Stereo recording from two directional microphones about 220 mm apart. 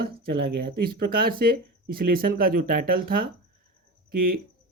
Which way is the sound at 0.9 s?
45° right (ahead or behind).